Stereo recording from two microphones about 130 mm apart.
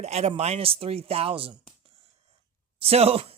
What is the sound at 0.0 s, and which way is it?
Speech, 55° right (ahead or behind).